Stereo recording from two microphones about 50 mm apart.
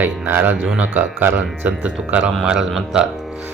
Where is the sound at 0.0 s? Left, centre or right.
Right.